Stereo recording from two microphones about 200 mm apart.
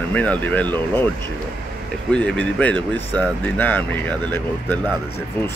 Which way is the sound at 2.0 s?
5° left (ahead or behind).